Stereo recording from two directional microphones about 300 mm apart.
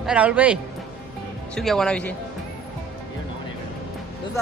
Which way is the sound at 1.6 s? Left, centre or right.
Centre.